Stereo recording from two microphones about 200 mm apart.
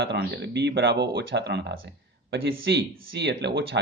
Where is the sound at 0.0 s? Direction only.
55° right (ahead or behind).